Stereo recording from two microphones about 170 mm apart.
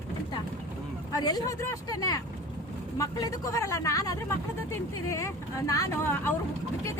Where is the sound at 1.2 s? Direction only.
20° left (ahead or behind).